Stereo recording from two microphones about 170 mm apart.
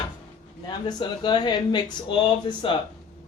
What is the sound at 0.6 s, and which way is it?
Speech, 25° left (ahead or behind).